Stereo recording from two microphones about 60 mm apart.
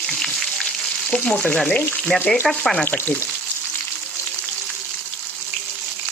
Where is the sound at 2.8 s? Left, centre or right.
Left.